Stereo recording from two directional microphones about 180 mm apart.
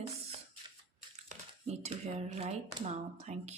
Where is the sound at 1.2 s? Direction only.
40° right (ahead or behind).